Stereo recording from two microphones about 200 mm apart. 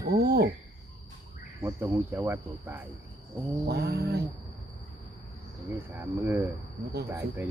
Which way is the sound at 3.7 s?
55° right (ahead or behind).